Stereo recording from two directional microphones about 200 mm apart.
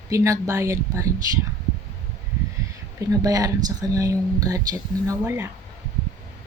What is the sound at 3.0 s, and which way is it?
Speech, 15° right (ahead or behind).